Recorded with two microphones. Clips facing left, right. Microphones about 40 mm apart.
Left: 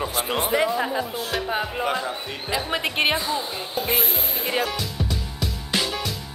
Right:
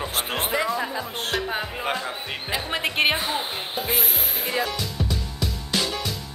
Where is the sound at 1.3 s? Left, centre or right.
Centre.